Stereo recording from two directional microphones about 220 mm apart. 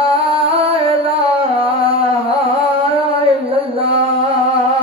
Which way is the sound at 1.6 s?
25° right (ahead or behind).